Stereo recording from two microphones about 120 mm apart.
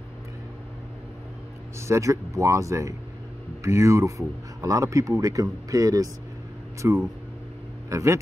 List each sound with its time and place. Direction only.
1.8 s speech: 25° right (ahead or behind)